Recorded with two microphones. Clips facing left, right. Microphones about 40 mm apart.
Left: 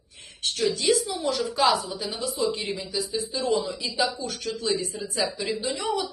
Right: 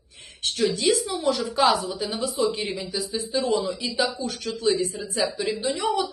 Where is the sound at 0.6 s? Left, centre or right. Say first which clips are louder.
Right 1 dB; right.